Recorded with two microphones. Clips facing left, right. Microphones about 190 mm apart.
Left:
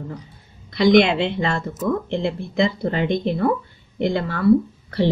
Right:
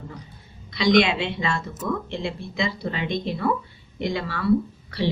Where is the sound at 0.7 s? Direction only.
55° left (ahead or behind).